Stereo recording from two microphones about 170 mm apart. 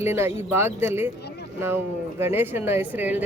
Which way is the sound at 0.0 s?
15° right (ahead or behind).